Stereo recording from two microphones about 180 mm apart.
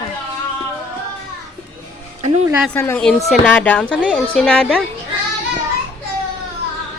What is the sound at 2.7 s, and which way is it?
A woman's voice, 15° left (ahead or behind).